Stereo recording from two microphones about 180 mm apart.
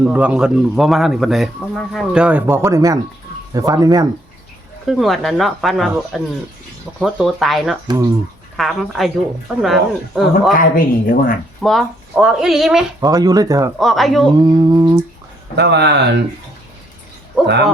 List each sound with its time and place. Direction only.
0.0 s speech: 5° right (ahead or behind)
4.9 s speech: centre (ahead or behind)
7.9 s speech: 20° right (ahead or behind)
8.5 s speech: centre (ahead or behind)
10.6 s speech: 50° left (ahead or behind)
11.6 s speech: centre (ahead or behind)
13.0 s speech: 20° right (ahead or behind)
13.7 s speech: centre (ahead or behind)
14.3 s speech: 20° right (ahead or behind)
15.5 s speech: 70° right (ahead or behind)
17.4 s speech: 65° right (ahead or behind)